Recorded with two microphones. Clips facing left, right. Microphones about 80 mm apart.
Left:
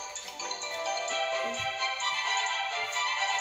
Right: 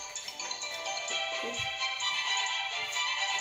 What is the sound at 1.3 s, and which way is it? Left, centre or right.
Music, left.